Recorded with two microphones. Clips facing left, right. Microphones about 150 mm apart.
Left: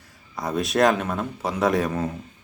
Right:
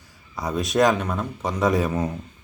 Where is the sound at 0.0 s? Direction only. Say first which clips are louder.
Even; centre (ahead or behind).